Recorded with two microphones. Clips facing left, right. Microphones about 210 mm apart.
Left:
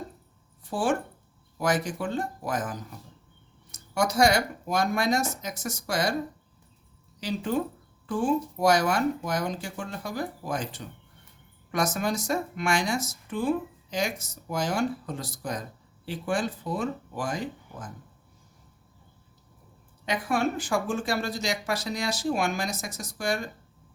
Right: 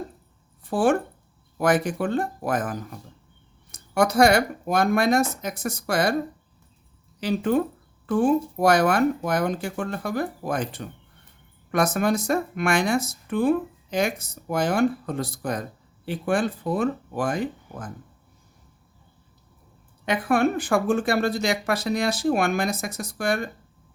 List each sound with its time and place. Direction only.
0.6 s speech: 55° right (ahead or behind)
7.2 s speech: 60° right (ahead or behind)
20.1 s speech: 55° right (ahead or behind)